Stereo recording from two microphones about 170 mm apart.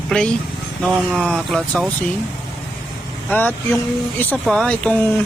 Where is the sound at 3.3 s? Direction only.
10° left (ahead or behind).